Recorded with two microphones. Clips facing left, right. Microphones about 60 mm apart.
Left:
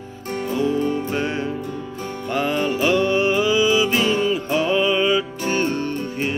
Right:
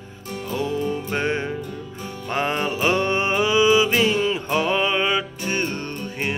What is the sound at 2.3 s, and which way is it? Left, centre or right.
Music, right.